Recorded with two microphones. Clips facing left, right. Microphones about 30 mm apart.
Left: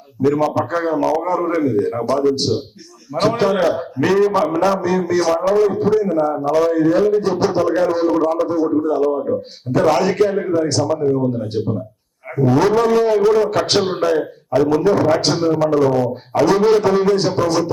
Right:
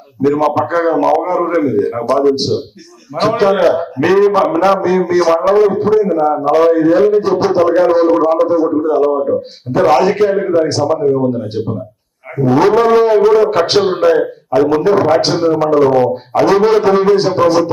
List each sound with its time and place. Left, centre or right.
0.3 s a man's voice: centre
2.0 s a man's voice: right
6.2 s a man's voice: right
11.5 s a man's voice: centre
13.7 s a man's voice: centre
14.0 s a man's voice: right
16.4 s a man's voice: centre